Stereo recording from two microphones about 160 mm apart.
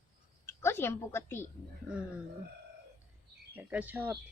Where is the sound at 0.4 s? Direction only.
15° left (ahead or behind).